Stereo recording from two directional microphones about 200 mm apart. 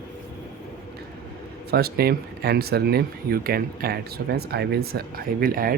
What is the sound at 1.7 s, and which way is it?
Speech, 50° right (ahead or behind).